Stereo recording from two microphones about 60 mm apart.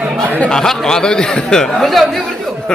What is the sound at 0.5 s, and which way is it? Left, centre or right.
A man's voice, centre.